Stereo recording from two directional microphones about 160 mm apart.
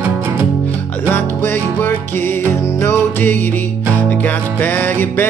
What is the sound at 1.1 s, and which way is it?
Music, 15° left (ahead or behind).